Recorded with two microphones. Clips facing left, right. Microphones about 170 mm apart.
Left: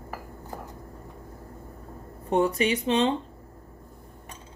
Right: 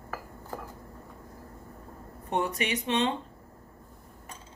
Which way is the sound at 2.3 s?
30° left (ahead or behind).